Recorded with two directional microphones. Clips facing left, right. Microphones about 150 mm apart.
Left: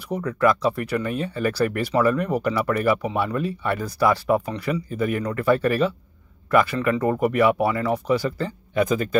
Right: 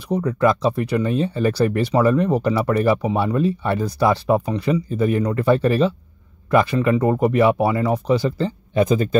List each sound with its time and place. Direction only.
0.1 s speech: 20° right (ahead or behind)